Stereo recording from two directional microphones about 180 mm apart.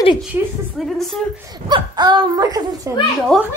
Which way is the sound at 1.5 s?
25° right (ahead or behind).